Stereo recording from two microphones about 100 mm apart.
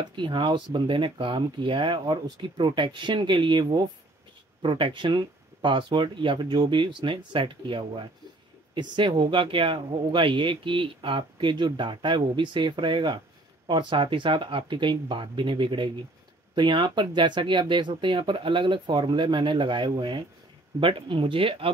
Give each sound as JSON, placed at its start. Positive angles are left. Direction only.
{"t": 0.1, "sound": "speech", "side_deg": -50}